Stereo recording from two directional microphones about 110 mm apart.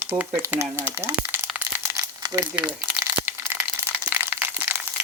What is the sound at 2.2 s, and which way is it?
Crumpling, 35° right (ahead or behind).